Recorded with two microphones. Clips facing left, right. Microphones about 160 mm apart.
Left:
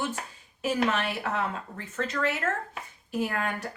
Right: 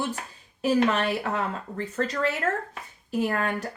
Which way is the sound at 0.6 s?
35° right (ahead or behind).